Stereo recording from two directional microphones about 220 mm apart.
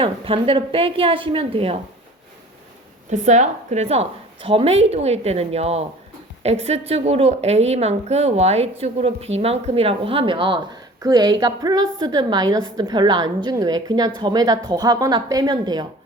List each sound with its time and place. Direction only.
0.0 s a woman's voice: 25° right (ahead or behind)
3.1 s a woman's voice: 35° right (ahead or behind)